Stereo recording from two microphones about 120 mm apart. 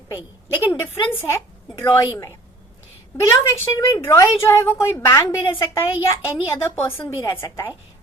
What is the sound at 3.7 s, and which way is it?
A woman's voice, 25° left (ahead or behind).